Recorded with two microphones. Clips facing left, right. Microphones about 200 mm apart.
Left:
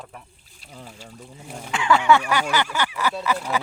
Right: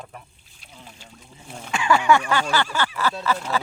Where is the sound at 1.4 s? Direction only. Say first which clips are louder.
Even; 15° left (ahead or behind).